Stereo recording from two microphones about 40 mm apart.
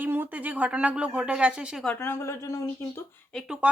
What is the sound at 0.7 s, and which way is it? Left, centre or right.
Speech, right.